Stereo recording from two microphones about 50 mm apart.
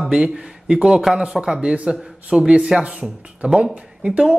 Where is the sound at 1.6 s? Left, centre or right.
Right.